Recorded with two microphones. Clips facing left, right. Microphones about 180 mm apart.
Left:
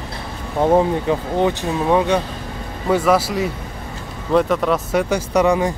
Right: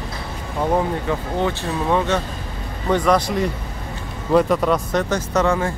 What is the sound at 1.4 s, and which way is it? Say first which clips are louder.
A man's voice: left 3 dB; 15° left (ahead or behind).